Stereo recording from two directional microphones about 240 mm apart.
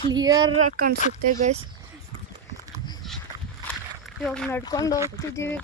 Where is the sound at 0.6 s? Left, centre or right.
Right.